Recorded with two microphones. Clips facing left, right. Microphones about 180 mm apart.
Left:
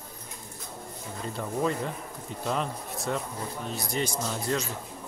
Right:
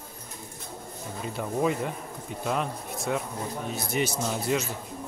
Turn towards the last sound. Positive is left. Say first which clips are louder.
# right 2 dB
turn(degrees=-10)  # may be behind; listen again after turning